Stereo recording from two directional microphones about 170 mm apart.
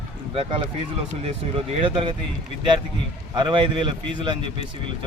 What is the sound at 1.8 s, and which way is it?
Speech, 30° right (ahead or behind).